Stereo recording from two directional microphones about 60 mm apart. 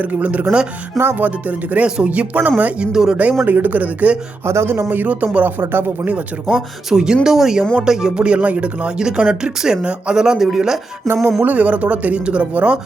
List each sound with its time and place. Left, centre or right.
0.0 s speech: right
3.4 s speech: right
4.4 s speech: right
6.5 s speech: centre
11.2 s a sound: centre
11.4 s speech: right